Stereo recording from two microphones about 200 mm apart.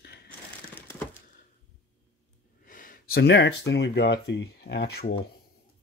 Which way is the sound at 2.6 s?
45° left (ahead or behind).